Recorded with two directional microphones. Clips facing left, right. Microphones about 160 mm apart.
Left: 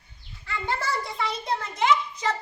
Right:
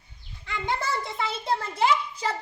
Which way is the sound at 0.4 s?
20° right (ahead or behind).